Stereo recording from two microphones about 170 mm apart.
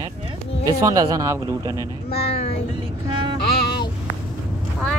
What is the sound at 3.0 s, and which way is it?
Music, 30° right (ahead or behind).